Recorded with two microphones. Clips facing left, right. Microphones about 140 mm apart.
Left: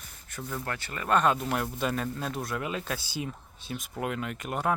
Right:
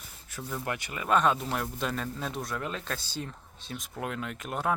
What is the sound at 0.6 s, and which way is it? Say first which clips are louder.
Speech: right 1 dB; 15° right (ahead or behind).